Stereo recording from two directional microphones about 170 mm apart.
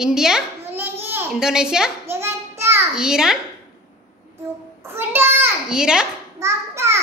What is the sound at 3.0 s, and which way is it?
Speech, 5° right (ahead or behind).